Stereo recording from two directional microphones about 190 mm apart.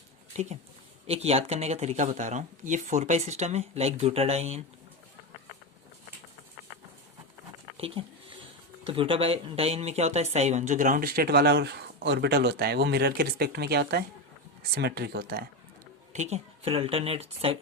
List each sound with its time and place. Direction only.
0.3 s speech: 35° right (ahead or behind)
7.8 s speech: 30° right (ahead or behind); by 15.4 s 55° right (ahead or behind)
16.1 s speech: 35° right (ahead or behind)